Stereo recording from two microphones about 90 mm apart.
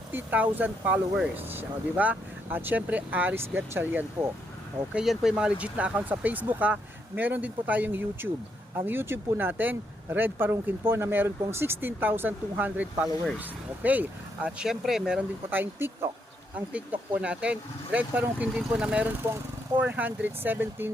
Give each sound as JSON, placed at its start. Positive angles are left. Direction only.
{"t": 0.1, "sound": "speech", "side_deg": -20}
{"t": 4.9, "sound": "speech", "side_deg": -10}
{"t": 15.4, "sound": "speech", "side_deg": -20}